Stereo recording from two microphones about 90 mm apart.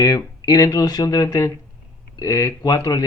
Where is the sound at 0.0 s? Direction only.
45° left (ahead or behind).